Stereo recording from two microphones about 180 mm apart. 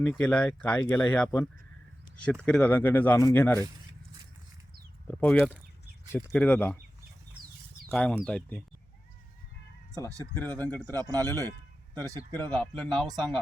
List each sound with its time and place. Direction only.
0.0 s speech: 10° left (ahead or behind)
5.0 s speech: 5° left (ahead or behind)
7.9 s speech: 10° left (ahead or behind)
10.3 s speech: 10° left (ahead or behind)
10.8 s speech: 20° right (ahead or behind)
12.3 s speech: 10° left (ahead or behind)